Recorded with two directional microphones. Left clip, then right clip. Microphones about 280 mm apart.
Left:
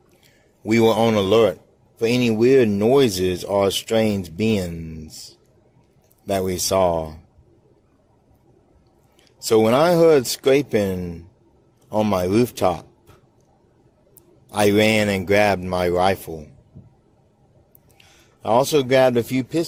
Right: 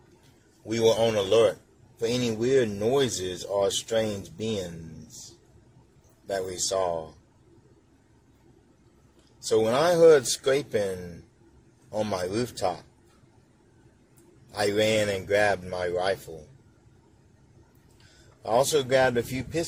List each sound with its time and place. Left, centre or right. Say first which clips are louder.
0.7 s speech: left 6 dB; left
6.2 s speech: left 7 dB; left
9.5 s speech: left 7 dB; left
11.9 s speech: left 9 dB; left
14.5 s speech: left 7 dB; left
18.4 s speech: left 6 dB; left